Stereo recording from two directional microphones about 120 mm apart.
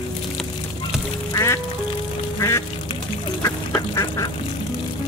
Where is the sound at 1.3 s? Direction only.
25° left (ahead or behind).